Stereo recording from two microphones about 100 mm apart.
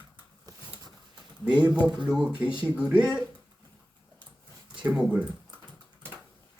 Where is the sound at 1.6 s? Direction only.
10° right (ahead or behind).